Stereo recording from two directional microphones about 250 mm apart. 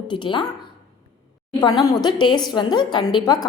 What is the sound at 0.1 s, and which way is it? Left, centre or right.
Speech, centre.